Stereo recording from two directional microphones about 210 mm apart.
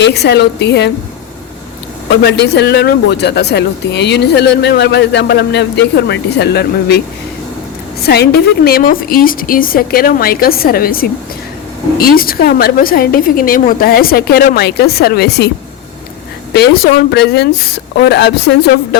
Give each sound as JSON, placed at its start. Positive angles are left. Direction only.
{"t": 0.0, "sound": "speech", "side_deg": 50}
{"t": 2.0, "sound": "speech", "side_deg": 55}
{"t": 8.0, "sound": "speech", "side_deg": 50}
{"t": 16.5, "sound": "speech", "side_deg": 50}